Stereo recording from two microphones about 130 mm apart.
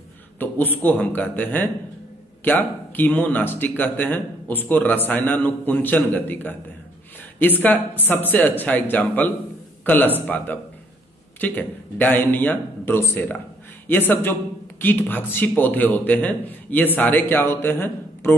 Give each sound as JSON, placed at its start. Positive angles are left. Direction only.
{"t": 0.4, "sound": "speech", "side_deg": 15}